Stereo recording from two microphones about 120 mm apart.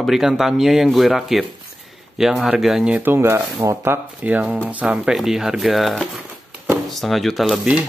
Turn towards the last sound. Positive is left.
turn(degrees=-5)  # may be behind; listen again after turning